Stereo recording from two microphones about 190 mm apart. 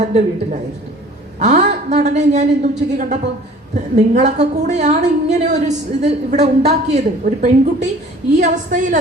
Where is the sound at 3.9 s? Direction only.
40° right (ahead or behind).